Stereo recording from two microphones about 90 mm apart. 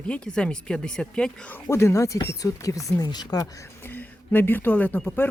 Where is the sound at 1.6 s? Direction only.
30° left (ahead or behind).